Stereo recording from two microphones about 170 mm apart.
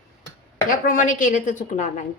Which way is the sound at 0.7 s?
50° left (ahead or behind).